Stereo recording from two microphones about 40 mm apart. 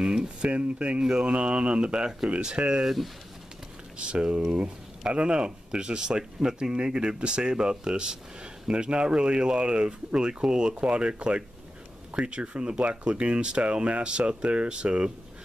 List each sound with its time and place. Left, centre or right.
0.0 s a sound: centre
0.5 s speech: right
1.0 s speech: right
2.8 s speech: centre
4.1 s speech: right